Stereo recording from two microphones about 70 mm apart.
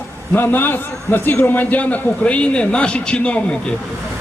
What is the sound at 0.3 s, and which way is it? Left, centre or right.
A man's voice, left.